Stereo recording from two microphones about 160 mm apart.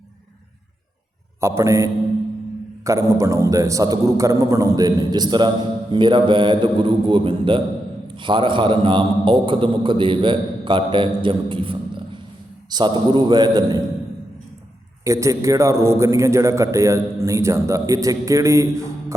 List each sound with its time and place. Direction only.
1.4 s a man's voice: 15° right (ahead or behind)
15.0 s a man's voice: 20° right (ahead or behind)